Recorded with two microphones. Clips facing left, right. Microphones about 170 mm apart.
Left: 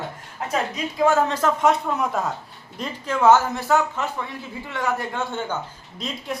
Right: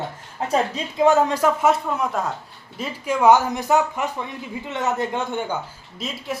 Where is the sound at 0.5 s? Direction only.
25° right (ahead or behind).